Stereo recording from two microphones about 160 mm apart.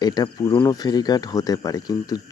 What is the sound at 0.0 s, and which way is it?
Speech, 25° left (ahead or behind).